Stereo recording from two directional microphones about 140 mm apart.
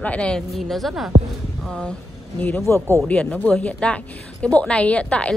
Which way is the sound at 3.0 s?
5° left (ahead or behind).